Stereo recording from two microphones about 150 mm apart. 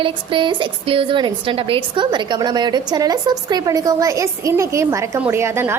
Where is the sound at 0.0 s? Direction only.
35° right (ahead or behind).